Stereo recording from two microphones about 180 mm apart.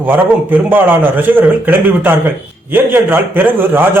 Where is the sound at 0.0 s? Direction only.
10° right (ahead or behind).